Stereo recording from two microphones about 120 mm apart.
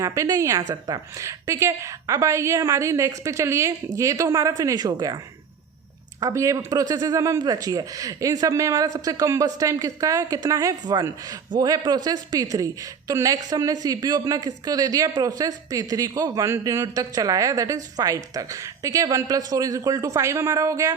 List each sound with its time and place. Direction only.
0.0 s speech: 25° right (ahead or behind)